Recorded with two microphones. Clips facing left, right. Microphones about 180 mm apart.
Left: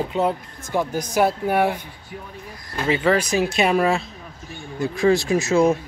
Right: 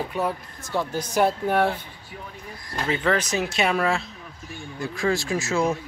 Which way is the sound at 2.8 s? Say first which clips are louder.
Left 4 dB; 10° left (ahead or behind).